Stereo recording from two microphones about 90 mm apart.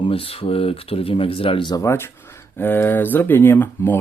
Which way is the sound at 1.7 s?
30° left (ahead or behind).